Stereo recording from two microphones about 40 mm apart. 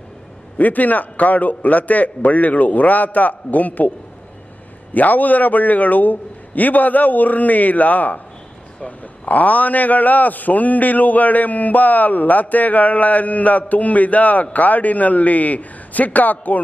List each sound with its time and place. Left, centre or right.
0.6 s a man's voice: left
4.9 s a man's voice: left